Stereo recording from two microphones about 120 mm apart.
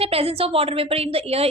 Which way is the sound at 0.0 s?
55° right (ahead or behind).